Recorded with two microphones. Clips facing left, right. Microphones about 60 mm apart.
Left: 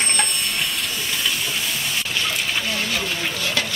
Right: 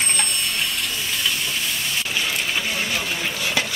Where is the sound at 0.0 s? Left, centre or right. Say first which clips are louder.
Left 1 dB; centre.